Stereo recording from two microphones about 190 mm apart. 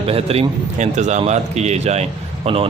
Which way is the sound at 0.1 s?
30° right (ahead or behind).